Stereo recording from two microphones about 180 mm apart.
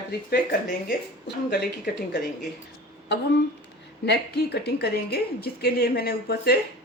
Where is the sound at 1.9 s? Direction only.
65° left (ahead or behind).